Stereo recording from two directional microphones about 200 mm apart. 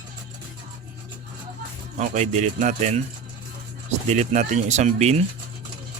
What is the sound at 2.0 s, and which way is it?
A man's voice, 35° right (ahead or behind).